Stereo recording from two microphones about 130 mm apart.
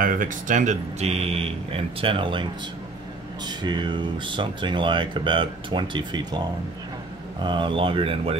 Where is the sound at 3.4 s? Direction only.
35° right (ahead or behind).